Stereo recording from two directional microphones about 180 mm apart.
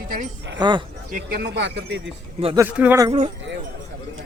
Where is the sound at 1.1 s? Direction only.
50° right (ahead or behind); by 2.1 s 85° right.